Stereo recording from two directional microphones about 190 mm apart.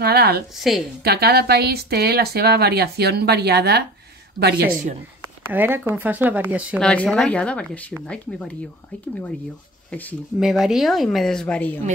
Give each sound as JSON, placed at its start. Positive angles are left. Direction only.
{"t": 0.0, "sound": "a woman's voice", "side_deg": -55}
{"t": 0.6, "sound": "speech", "side_deg": 0}
{"t": 1.0, "sound": "speech", "side_deg": -55}
{"t": 5.5, "sound": "speech", "side_deg": -10}
{"t": 6.8, "sound": "speech", "side_deg": 5}
{"t": 9.8, "sound": "speech", "side_deg": 5}